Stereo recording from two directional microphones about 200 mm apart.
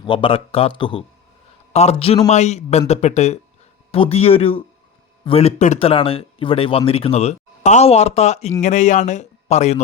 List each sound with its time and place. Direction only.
0.0 s speech: 25° left (ahead or behind)